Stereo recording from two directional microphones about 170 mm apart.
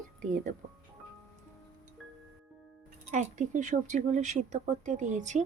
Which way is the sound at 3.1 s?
45° right (ahead or behind).